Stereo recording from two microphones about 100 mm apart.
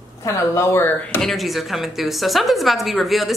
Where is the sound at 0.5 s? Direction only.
25° left (ahead or behind).